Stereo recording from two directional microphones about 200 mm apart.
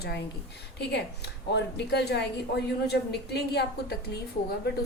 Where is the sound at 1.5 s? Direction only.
55° left (ahead or behind).